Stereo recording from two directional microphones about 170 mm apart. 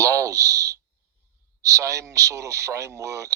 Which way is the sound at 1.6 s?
20° right (ahead or behind).